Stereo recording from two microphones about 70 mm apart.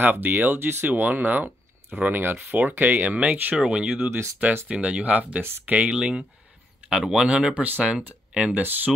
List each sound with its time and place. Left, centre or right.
0.0 s speech: right; by 3.9 s centre
3.9 s speech: right
4.6 s speech: centre